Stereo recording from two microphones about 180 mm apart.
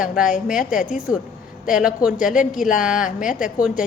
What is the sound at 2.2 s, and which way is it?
A woman's voice, 45° left (ahead or behind).